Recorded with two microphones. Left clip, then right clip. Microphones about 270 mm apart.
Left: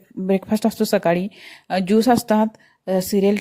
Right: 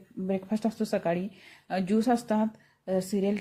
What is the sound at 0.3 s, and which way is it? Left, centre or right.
A woman's voice, left.